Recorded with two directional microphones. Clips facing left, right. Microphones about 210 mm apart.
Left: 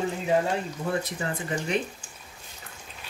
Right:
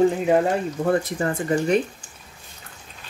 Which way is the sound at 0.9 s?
50° right (ahead or behind).